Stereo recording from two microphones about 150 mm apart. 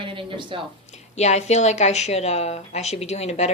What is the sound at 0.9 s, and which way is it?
Speech, 50° left (ahead or behind).